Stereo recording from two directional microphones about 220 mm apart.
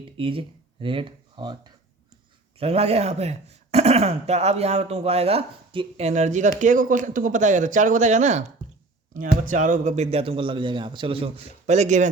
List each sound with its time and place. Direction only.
0.0 s speech: 25° right (ahead or behind)
2.6 s speech: 30° right (ahead or behind)